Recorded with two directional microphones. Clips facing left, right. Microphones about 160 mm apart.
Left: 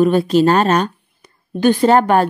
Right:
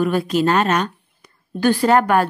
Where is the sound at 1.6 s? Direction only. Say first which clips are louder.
Left 3 dB; 20° left (ahead or behind).